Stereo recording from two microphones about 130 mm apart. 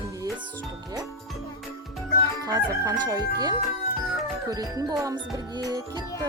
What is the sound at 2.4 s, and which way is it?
Crowing, 25° right (ahead or behind).